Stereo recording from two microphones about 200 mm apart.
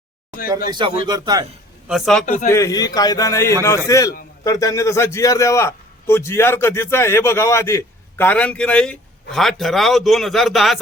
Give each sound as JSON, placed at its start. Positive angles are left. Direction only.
{"t": 0.7, "sound": "a man's voice", "side_deg": -25}
{"t": 1.9, "sound": "a man's voice", "side_deg": 0}
{"t": 2.2, "sound": "a man's voice", "side_deg": 40}
{"t": 2.5, "sound": "a man's voice", "side_deg": 15}